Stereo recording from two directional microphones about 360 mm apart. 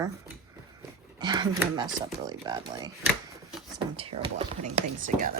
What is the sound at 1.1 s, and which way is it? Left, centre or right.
Speech, centre.